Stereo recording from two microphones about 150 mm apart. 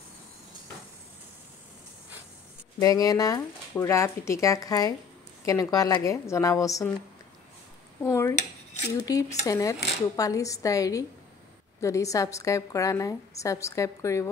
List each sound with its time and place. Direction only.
2.8 s speech: 25° left (ahead or behind)
8.0 s speech: 20° left (ahead or behind)